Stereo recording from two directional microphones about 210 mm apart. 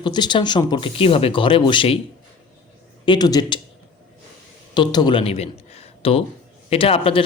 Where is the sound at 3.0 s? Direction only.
20° left (ahead or behind).